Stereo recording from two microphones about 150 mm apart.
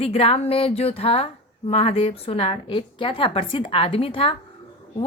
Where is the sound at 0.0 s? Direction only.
40° left (ahead or behind).